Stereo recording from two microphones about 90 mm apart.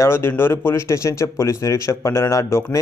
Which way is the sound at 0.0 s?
30° left (ahead or behind).